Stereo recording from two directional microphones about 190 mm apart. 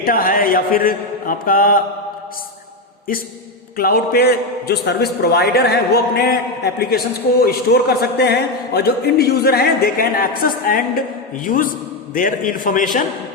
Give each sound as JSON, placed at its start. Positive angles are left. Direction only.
{"t": 0.0, "sound": "mantra", "side_deg": 50}
{"t": 3.8, "sound": "a man's voice", "side_deg": 55}
{"t": 7.4, "sound": "a man's voice", "side_deg": 55}
{"t": 11.4, "sound": "mantra", "side_deg": 45}